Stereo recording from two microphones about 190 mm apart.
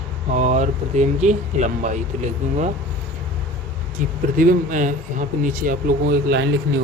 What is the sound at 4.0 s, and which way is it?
Speech, 45° right (ahead or behind).